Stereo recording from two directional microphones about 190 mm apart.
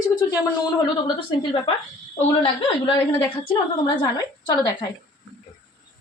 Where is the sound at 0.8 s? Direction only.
30° left (ahead or behind).